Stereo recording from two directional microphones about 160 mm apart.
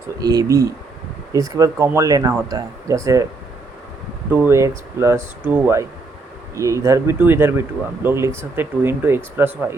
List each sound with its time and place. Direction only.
0.2 s speech: 25° right (ahead or behind)
4.3 s speech: 10° right (ahead or behind)